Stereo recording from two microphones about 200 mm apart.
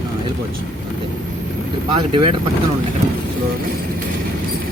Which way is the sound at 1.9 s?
25° right (ahead or behind).